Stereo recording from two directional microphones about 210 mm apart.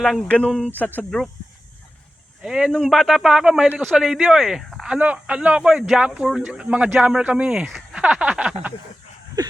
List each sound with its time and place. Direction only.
0.0 s speech: centre (ahead or behind)
2.4 s speech: centre (ahead or behind)
9.4 s a sound: 20° right (ahead or behind)